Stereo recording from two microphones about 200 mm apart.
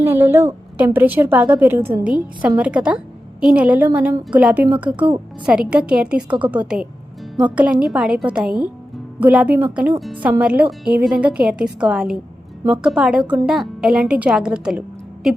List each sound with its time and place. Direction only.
0.0 s a woman's voice: 10° right (ahead or behind)